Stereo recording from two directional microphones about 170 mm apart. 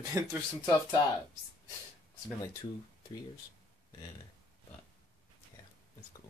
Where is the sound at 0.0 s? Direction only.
20° right (ahead or behind).